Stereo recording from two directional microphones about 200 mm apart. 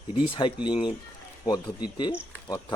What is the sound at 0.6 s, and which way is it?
Speech, 25° left (ahead or behind).